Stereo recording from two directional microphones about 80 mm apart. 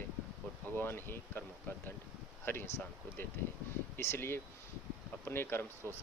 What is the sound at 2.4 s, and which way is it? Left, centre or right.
Speech, left.